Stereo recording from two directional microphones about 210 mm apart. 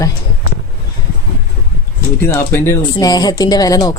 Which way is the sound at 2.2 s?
10° left (ahead or behind).